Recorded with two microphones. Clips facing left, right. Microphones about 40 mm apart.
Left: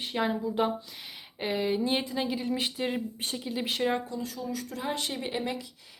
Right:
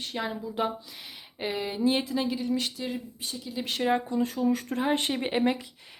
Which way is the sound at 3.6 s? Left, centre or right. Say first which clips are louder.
Right 1 dB; centre.